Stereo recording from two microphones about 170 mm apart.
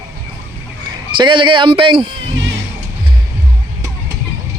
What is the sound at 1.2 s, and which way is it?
Speech, 30° right (ahead or behind).